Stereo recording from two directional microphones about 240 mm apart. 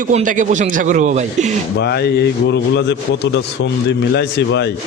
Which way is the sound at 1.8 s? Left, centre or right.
Left.